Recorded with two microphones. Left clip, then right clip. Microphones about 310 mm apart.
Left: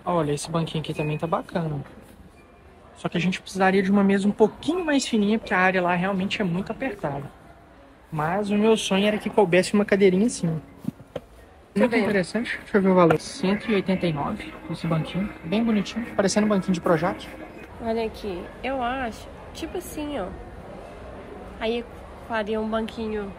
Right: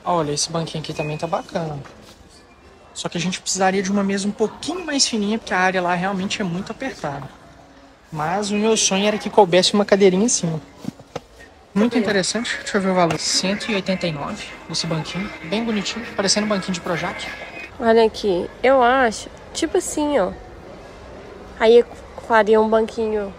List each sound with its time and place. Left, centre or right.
0.0 s speech: centre
3.0 s speech: centre
8.2 s speech: centre
12.1 s speech: centre
17.8 s a woman's voice: right
21.5 s a woman's voice: right